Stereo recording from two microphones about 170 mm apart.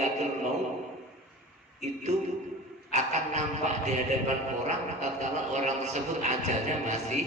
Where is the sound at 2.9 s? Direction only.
40° right (ahead or behind).